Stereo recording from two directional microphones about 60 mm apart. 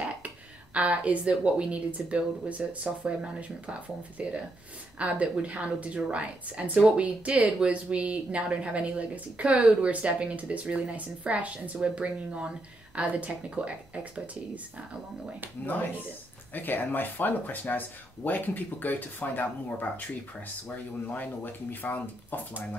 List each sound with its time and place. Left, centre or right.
0.7 s speech: right
16.5 s speech: left